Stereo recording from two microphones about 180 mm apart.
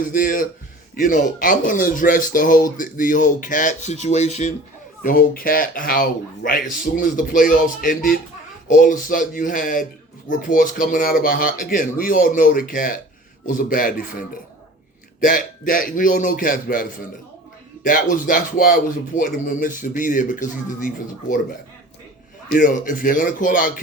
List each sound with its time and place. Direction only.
0.0 s speech: 50° left (ahead or behind)
5.0 s speech: 50° left (ahead or behind)
15.2 s speech: 50° left (ahead or behind)
22.4 s speech: 50° left (ahead or behind)